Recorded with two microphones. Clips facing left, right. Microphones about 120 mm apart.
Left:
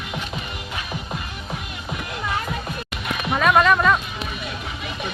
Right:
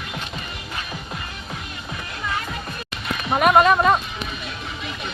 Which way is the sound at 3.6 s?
35° right (ahead or behind).